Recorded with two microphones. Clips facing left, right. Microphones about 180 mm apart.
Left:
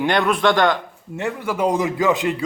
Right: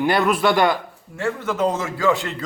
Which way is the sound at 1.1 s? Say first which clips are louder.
Even; 15° left (ahead or behind).